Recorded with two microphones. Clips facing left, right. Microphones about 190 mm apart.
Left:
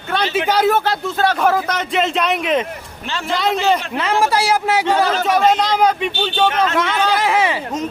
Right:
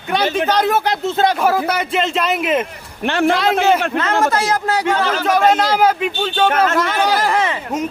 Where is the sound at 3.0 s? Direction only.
60° right (ahead or behind).